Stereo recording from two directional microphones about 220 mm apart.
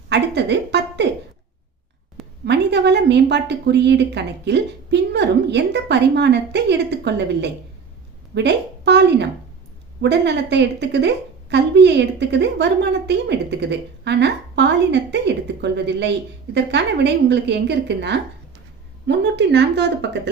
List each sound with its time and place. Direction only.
0.1 s a woman's voice: 50° right (ahead or behind)
2.4 s a woman's voice: 50° right (ahead or behind)